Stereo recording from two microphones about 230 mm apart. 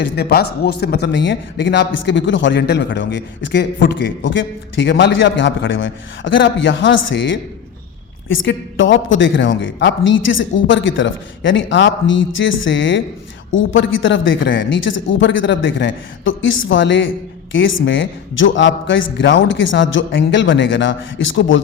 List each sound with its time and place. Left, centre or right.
0.0 s a man's voice: left